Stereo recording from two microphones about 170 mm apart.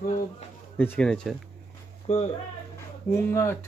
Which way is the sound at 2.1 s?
40° left (ahead or behind).